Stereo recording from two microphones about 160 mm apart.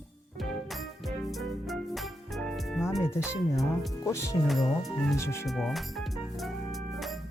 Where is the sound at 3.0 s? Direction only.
15° left (ahead or behind).